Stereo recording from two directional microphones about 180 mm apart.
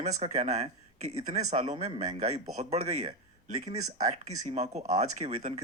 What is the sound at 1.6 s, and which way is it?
Speech, 25° right (ahead or behind).